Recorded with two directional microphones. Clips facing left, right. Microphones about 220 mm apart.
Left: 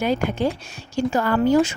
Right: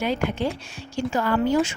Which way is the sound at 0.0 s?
45° left (ahead or behind).